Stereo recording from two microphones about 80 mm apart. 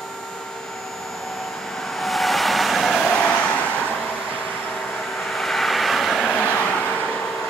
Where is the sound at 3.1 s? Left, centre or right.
Centre.